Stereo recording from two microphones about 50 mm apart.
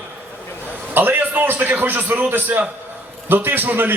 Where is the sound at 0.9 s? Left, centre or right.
Right.